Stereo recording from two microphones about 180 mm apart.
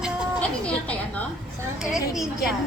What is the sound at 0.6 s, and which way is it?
Speech, 5° left (ahead or behind).